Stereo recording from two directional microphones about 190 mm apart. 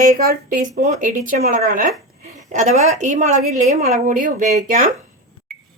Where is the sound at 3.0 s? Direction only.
40° right (ahead or behind).